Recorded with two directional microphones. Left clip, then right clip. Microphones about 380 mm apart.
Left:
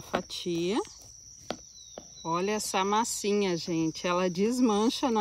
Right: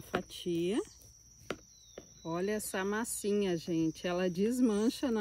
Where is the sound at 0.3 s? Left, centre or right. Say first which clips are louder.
Left 4 dB; centre.